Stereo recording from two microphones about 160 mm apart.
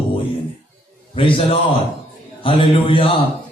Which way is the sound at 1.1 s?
35° left (ahead or behind).